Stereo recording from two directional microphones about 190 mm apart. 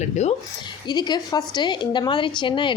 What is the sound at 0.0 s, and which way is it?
Speech, 35° left (ahead or behind).